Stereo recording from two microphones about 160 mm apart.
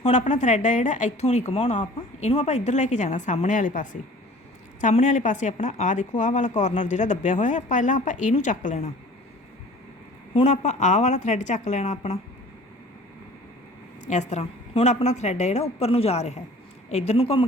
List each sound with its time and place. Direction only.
0.0 s speech: 45° left (ahead or behind)
10.4 s speech: 45° left (ahead or behind)
14.0 s speech: 45° left (ahead or behind)